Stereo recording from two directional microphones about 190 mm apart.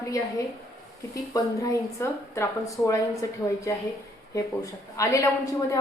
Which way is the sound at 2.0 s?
15° left (ahead or behind).